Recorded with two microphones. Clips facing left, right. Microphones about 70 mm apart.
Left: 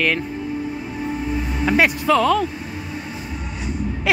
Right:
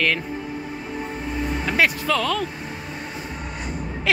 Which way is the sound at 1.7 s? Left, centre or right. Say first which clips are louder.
Left 5 dB; centre.